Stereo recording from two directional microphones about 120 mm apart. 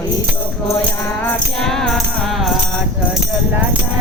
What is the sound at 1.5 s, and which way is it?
Music, 5° left (ahead or behind).